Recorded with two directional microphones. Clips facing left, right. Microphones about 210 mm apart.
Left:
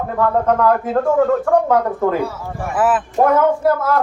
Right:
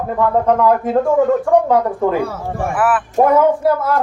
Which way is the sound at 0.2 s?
Centre (ahead or behind).